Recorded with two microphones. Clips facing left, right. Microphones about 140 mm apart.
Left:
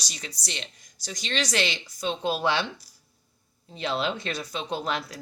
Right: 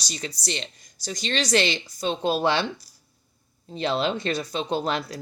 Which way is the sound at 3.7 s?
30° right (ahead or behind).